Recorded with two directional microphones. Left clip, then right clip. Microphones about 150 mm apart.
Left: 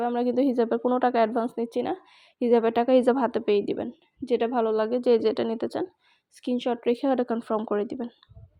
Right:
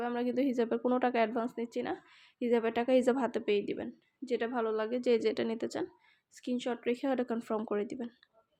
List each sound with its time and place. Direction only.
0.0 s a woman's voice: 25° left (ahead or behind); by 1.5 s 5° left (ahead or behind)
1.5 s a woman's voice: 30° left (ahead or behind); by 5.9 s 5° left (ahead or behind)
6.3 s speech: 35° left (ahead or behind)
7.0 s a woman's voice: 15° left (ahead or behind)